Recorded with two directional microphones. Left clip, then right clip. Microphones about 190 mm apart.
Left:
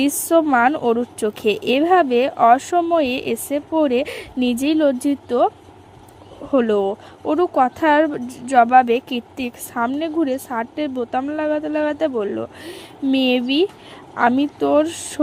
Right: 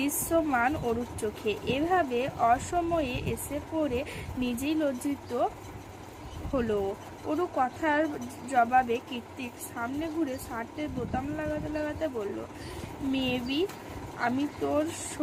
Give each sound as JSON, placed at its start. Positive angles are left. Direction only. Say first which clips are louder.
{"t": 0.0, "sound": "speech", "louder": "left 11 dB", "side_deg": 45}
{"t": 6.5, "sound": "speech", "louder": "left 12 dB", "side_deg": 50}